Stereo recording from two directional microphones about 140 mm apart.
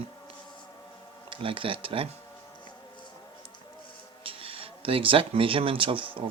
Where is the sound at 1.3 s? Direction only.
40° right (ahead or behind).